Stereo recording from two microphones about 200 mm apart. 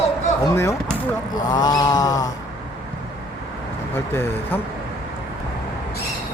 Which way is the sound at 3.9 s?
10° left (ahead or behind).